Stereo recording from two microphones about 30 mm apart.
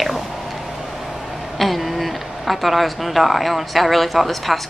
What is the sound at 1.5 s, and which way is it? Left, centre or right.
Speech, centre.